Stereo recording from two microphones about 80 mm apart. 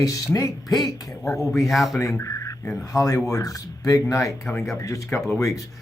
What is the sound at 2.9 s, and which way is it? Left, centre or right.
Speech, left.